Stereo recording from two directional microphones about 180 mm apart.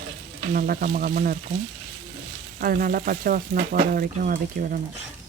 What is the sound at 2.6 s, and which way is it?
Speech, 55° right (ahead or behind).